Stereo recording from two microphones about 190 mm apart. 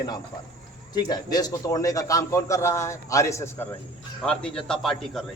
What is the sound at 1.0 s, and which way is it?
A man's voice, 20° left (ahead or behind).